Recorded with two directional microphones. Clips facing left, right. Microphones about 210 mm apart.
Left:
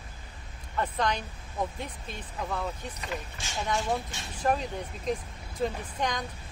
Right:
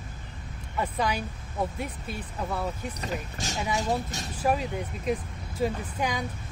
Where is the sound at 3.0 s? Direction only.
40° right (ahead or behind).